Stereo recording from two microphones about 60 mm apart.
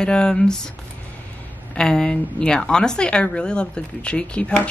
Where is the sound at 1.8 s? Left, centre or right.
Centre.